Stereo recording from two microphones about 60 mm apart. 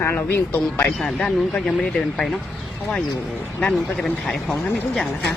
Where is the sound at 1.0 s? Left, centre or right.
Centre.